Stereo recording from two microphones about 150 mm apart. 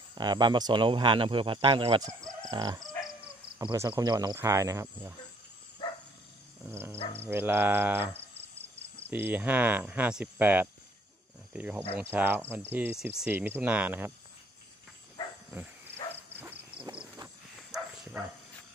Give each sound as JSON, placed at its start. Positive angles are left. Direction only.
{"t": 0.1, "sound": "speech", "side_deg": -30}
{"t": 2.0, "sound": "chicken", "side_deg": -25}
{"t": 3.5, "sound": "speech", "side_deg": -20}
{"t": 6.6, "sound": "speech", "side_deg": -15}
{"t": 16.3, "sound": "a sound", "side_deg": -10}
{"t": 17.6, "sound": "bow-wow", "side_deg": -5}